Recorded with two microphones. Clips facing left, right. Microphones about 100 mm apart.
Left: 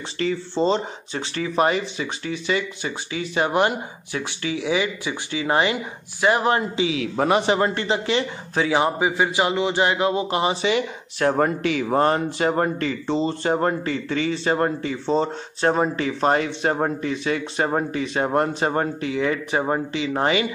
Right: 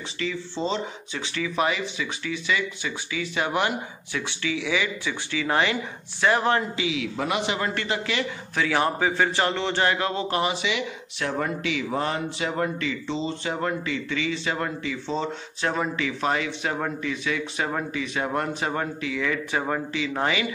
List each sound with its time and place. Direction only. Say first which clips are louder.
0.2 s speech: left 7 dB; 40° left (ahead or behind)
5.0 s speech: left 2 dB; 25° left (ahead or behind)
6.9 s speech: left 8 dB; 40° left (ahead or behind)
7.7 s speech: left 5 dB; 25° left (ahead or behind)
10.5 s speech: left 6 dB; 40° left (ahead or behind)